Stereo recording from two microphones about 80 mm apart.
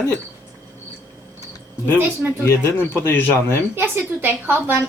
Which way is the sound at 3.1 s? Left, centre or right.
Left.